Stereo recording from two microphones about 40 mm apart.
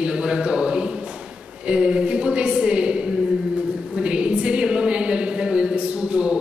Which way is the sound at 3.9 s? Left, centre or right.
Right.